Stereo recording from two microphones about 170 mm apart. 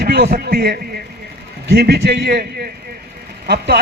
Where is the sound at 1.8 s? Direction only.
70° right (ahead or behind).